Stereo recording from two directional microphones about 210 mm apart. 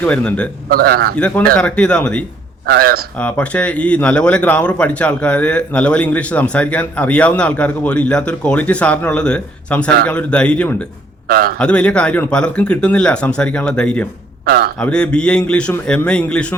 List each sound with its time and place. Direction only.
0.0 s a man's voice: 5° left (ahead or behind)
0.7 s a man's voice: 45° right (ahead or behind)
1.5 s speech: 5° left (ahead or behind)
2.6 s a man's voice: 45° right (ahead or behind)
3.2 s speech: 5° left (ahead or behind)
11.3 s a man's voice: 45° right (ahead or behind)
11.6 s speech: 5° left (ahead or behind)
14.4 s speech: 45° right (ahead or behind)
14.8 s speech: 5° left (ahead or behind)